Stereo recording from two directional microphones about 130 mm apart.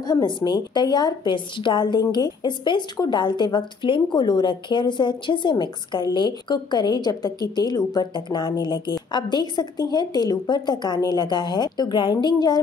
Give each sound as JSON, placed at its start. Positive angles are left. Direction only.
{"t": 0.0, "sound": "a woman's voice", "side_deg": 30}